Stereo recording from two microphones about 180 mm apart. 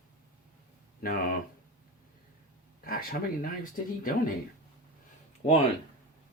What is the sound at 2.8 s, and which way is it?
Speech, 55° left (ahead or behind).